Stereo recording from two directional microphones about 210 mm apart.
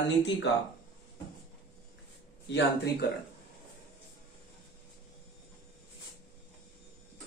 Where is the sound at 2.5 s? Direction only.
50° left (ahead or behind).